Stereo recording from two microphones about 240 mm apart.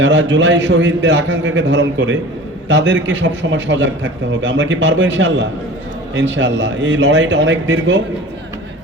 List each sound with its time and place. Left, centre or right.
0.0 s a man's voice: right